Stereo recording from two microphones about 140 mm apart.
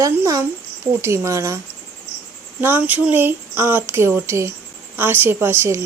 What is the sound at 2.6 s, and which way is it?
Speech, 15° right (ahead or behind).